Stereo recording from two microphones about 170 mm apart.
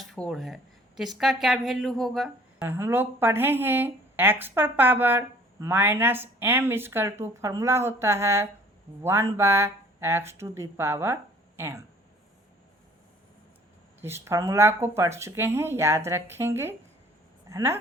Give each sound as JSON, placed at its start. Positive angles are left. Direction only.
{"t": 0.1, "sound": "speech", "side_deg": 0}
{"t": 2.6, "sound": "speech", "side_deg": -15}
{"t": 14.0, "sound": "speech", "side_deg": -15}